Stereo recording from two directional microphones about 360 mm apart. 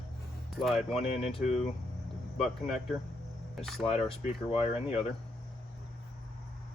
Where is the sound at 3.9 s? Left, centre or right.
Centre.